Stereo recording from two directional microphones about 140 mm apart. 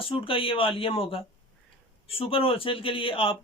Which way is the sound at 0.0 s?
40° left (ahead or behind).